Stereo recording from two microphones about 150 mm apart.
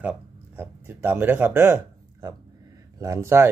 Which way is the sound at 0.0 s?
10° right (ahead or behind).